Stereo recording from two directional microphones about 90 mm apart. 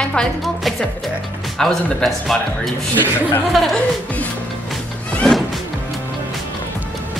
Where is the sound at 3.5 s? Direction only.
Centre (ahead or behind).